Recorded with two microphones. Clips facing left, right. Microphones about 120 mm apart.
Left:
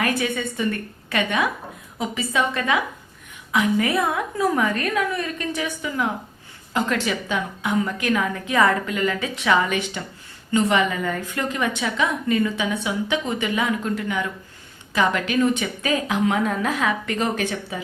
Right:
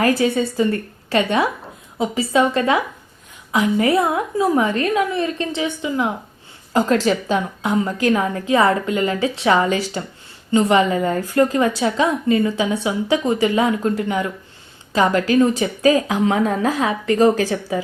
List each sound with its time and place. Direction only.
0.0 s a woman's voice: 30° right (ahead or behind)